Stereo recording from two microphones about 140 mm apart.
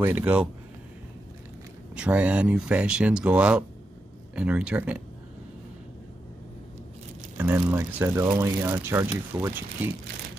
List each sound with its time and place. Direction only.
0.0 s speech: 10° right (ahead or behind)
2.0 s speech: 10° right (ahead or behind)
7.3 s speech: 15° right (ahead or behind)